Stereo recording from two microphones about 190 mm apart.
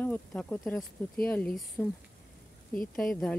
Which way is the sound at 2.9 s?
5° left (ahead or behind).